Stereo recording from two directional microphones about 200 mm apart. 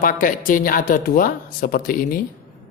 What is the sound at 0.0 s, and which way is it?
Speech, 45° left (ahead or behind).